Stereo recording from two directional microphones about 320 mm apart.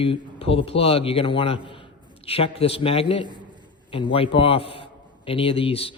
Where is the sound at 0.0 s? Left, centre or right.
Centre.